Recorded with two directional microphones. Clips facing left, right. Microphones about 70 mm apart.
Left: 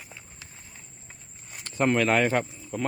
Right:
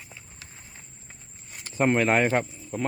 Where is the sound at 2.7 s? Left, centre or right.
Centre.